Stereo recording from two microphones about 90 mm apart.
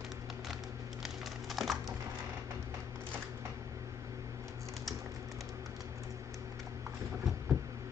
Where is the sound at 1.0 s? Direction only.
Centre (ahead or behind).